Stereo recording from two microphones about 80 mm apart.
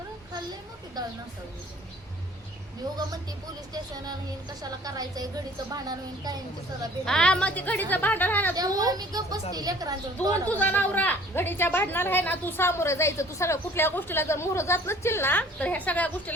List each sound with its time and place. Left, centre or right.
1.0 s a woman's voice: right
4.6 s a woman's voice: right
7.0 s a woman's voice: centre
8.5 s a woman's voice: right
10.5 s a woman's voice: left